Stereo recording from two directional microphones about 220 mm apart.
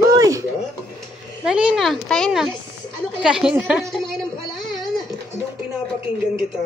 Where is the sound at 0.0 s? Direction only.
15° right (ahead or behind).